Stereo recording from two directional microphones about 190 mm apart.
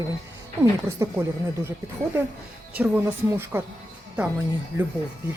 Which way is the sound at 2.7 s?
10° right (ahead or behind).